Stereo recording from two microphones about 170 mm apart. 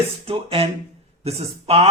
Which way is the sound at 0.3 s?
35° right (ahead or behind).